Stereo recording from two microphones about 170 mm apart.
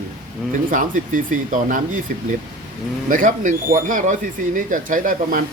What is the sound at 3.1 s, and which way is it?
Speech, 50° right (ahead or behind).